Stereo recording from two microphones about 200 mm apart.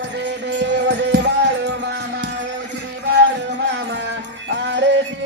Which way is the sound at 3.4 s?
60° right (ahead or behind).